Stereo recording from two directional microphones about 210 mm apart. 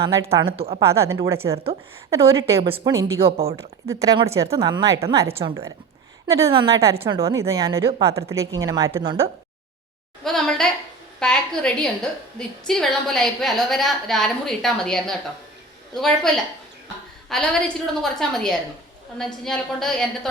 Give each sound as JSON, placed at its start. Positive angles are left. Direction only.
{"t": 0.0, "sound": "a woman's voice", "side_deg": -15}
{"t": 0.5, "sound": "speech", "side_deg": -25}
{"t": 0.9, "sound": "a woman's voice", "side_deg": -15}
{"t": 2.6, "sound": "speech", "side_deg": -25}
{"t": 2.9, "sound": "a woman's voice", "side_deg": -15}
{"t": 3.2, "sound": "speech", "side_deg": -25}
{"t": 3.6, "sound": "a woman's voice", "side_deg": -15}
{"t": 5.3, "sound": "speech", "side_deg": -25}
{"t": 6.2, "sound": "a woman's voice", "side_deg": -15}
{"t": 6.9, "sound": "speech", "side_deg": -25}
{"t": 7.2, "sound": "a woman's voice", "side_deg": -15}
{"t": 10.2, "sound": "a sound", "side_deg": 0}
{"t": 12.4, "sound": "a woman's voice", "side_deg": 0}